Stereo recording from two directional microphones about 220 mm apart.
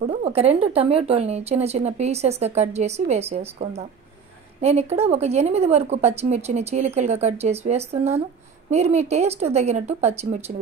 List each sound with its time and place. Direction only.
0.0 s a woman's voice: 30° right (ahead or behind)